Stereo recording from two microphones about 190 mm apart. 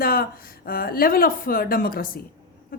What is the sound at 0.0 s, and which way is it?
A woman's voice, 50° left (ahead or behind).